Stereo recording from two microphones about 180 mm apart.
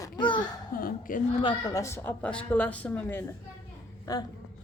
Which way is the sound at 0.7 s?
50° left (ahead or behind).